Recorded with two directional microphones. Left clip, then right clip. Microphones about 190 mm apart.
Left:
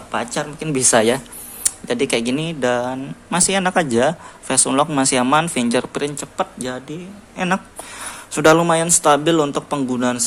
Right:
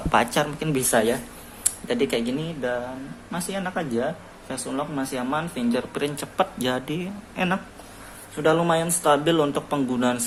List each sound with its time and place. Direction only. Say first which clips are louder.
0.1 s speech: right 2 dB; centre (ahead or behind)
0.7 s speech: left 8 dB; 20° left (ahead or behind)
6.0 s speech: left 2 dB; 10° left (ahead or behind)
7.3 s a woman's voice: left 5 dB; 15° left (ahead or behind)
8.4 s speech: left 7 dB; 25° left (ahead or behind)